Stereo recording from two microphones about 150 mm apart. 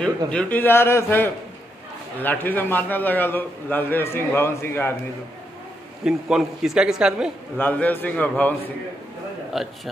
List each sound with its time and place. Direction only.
0.3 s a man's voice: 10° left (ahead or behind)
6.0 s a man's voice: 5° right (ahead or behind)
7.5 s a man's voice: 10° left (ahead or behind)
9.5 s a man's voice: centre (ahead or behind)